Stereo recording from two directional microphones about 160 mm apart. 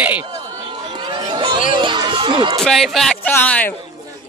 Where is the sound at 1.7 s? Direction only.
30° right (ahead or behind).